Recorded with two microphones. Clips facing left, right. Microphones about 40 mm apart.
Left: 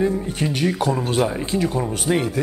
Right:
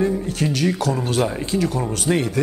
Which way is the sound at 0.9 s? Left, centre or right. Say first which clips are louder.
Left 1 dB; centre.